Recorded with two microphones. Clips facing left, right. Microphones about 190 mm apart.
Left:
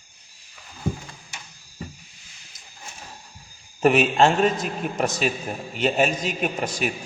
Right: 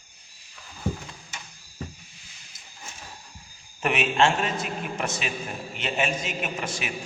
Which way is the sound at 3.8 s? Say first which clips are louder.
Left 6 dB; 40° left (ahead or behind).